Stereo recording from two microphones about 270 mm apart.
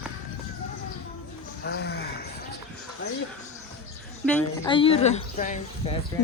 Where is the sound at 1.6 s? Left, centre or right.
Left.